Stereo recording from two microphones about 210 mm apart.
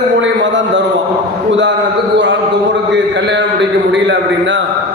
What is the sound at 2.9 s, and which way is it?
A man's voice, 60° right (ahead or behind).